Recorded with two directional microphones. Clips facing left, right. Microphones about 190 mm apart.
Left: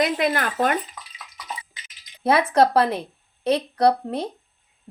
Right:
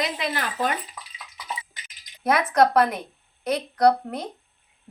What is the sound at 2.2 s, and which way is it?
A woman's voice, 30° left (ahead or behind).